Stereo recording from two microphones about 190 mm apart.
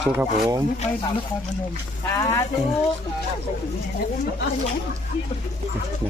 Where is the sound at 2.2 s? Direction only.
15° left (ahead or behind).